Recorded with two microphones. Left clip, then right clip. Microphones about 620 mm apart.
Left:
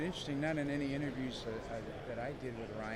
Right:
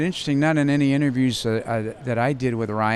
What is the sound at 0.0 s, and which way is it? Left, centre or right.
Speech, right.